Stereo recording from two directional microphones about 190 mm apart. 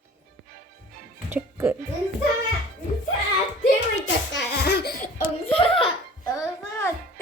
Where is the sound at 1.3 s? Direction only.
10° right (ahead or behind).